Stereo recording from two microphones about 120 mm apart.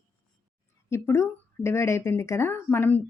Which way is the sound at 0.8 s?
20° left (ahead or behind).